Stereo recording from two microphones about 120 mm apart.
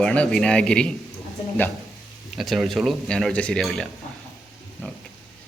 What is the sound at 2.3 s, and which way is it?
Speech, centre (ahead or behind).